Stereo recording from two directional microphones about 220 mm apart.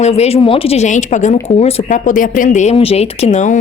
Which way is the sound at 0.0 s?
30° left (ahead or behind).